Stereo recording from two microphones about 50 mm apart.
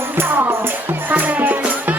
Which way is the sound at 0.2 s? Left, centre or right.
Right.